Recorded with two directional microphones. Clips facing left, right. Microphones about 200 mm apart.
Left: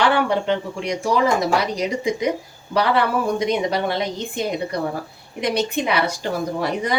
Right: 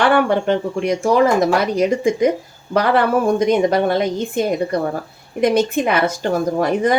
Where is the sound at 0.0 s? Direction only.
50° right (ahead or behind).